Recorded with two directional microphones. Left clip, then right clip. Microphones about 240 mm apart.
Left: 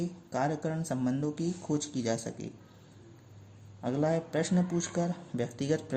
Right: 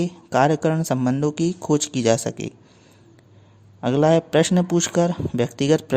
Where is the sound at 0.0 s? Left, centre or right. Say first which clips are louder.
Right 13 dB; right.